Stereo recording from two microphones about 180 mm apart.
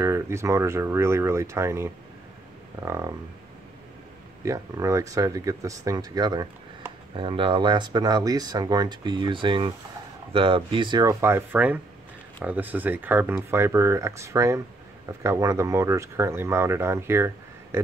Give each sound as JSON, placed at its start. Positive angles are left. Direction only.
{"t": 0.0, "sound": "speech", "side_deg": -15}
{"t": 4.5, "sound": "speech", "side_deg": -15}